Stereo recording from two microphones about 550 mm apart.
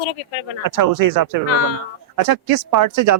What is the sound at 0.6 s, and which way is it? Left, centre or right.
Speech, right.